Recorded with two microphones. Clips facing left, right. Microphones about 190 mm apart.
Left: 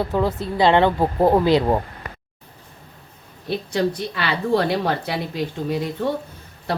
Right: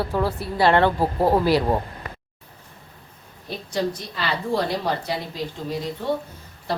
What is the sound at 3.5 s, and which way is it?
A woman's voice, 65° left (ahead or behind).